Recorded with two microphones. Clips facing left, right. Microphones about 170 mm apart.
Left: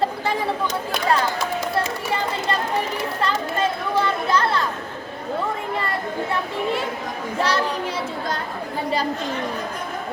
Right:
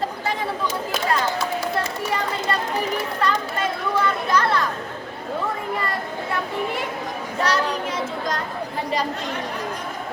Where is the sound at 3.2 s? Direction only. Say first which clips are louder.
Left 2 dB; 25° left (ahead or behind).